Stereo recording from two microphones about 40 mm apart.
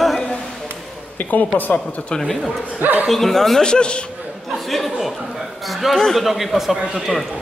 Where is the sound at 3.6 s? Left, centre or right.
Left.